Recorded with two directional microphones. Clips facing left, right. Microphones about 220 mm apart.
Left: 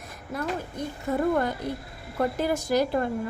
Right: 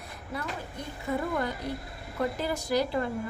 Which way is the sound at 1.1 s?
45° left (ahead or behind).